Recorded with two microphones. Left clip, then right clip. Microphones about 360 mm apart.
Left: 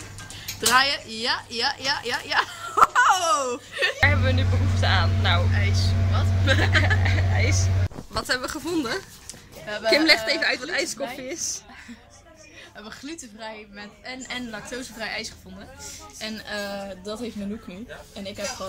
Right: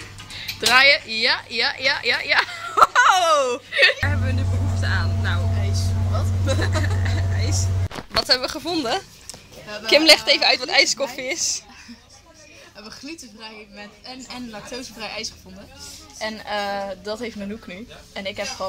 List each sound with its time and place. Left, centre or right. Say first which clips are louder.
0.6 s a woman's voice: right 6 dB; centre
5.6 s vehicle: left 2 dB; centre
7.0 s a sound: left 4 dB; centre
8.2 s a woman's voice: right 6 dB; centre
12.8 s a woman's voice: right 2 dB; centre
16.3 s speech: right 6 dB; centre